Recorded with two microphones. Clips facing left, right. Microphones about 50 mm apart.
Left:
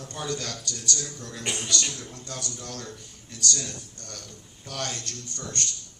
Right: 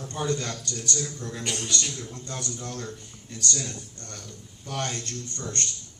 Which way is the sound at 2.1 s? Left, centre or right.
Right.